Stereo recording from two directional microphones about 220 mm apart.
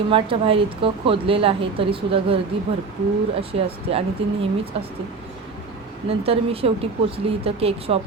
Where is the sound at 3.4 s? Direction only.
25° right (ahead or behind).